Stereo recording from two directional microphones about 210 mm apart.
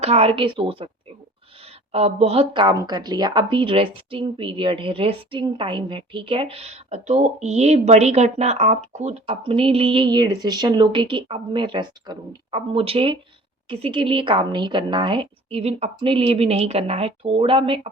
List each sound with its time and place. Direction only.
0.0 s a woman's voice: 30° right (ahead or behind)
1.9 s a woman's voice: 30° right (ahead or behind)